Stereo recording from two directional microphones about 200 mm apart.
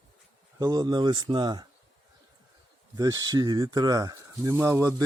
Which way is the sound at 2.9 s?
20° right (ahead or behind).